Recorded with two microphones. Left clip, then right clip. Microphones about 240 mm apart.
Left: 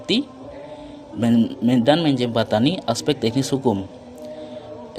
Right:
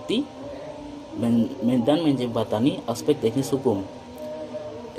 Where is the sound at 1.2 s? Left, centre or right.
Left.